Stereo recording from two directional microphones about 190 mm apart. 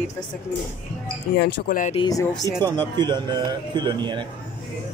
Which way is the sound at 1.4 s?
45° left (ahead or behind).